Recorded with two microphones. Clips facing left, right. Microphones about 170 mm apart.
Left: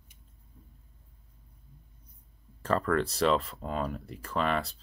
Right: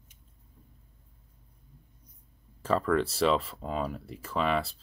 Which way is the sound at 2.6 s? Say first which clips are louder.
Right 1 dB; 5° right (ahead or behind).